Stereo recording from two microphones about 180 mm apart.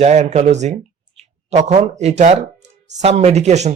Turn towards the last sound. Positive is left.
turn(degrees=-40)  # may be behind; listen again after turning